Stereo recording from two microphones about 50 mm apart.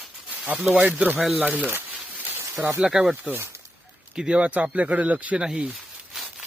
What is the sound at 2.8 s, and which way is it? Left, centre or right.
Speech, centre.